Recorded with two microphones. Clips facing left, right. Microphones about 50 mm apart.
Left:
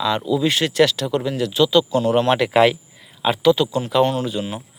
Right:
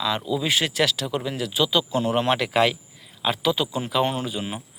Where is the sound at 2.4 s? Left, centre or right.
Centre.